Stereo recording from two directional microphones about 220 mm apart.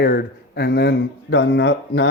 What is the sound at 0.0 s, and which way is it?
Speech, 45° left (ahead or behind).